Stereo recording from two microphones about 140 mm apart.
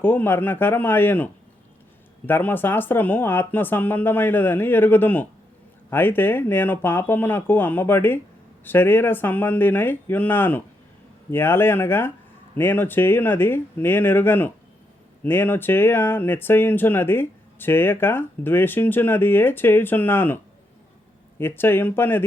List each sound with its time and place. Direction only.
0.0 s speech: 15° left (ahead or behind)